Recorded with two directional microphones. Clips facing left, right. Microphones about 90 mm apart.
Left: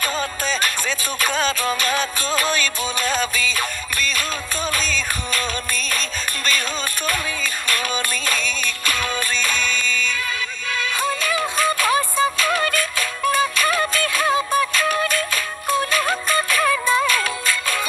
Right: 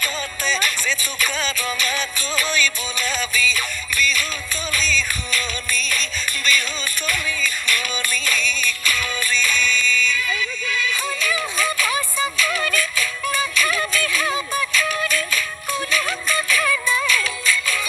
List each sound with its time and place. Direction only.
0.0 s music: 45° left (ahead or behind)
10.7 s synthetic singing: 50° left (ahead or behind)